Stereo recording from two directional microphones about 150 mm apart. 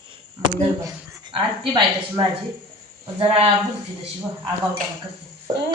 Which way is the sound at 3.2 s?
40° right (ahead or behind).